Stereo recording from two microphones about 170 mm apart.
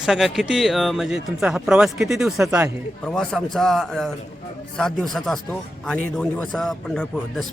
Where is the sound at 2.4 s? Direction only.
15° right (ahead or behind).